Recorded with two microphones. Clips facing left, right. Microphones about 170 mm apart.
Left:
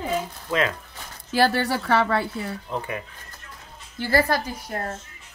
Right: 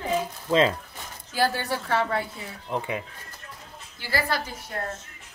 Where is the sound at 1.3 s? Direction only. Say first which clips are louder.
Left 5 dB; 75° left (ahead or behind).